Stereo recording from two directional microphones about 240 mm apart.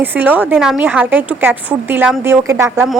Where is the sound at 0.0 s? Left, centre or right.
Centre.